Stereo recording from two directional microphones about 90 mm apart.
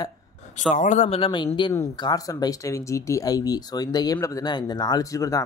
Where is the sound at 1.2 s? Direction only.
65° left (ahead or behind).